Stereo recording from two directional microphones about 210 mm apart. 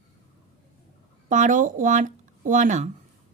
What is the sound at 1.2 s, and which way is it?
Speech, 35° right (ahead or behind).